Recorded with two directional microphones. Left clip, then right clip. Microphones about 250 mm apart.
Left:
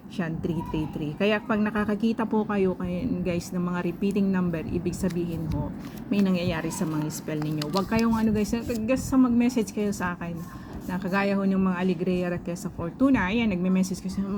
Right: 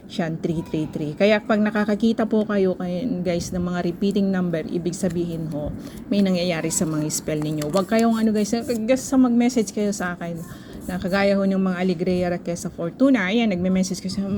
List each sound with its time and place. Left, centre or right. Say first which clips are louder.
0.2 s a woman's voice: right 5 dB; centre